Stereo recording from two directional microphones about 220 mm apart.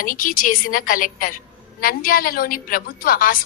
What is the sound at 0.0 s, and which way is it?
A woman's voice, 40° left (ahead or behind).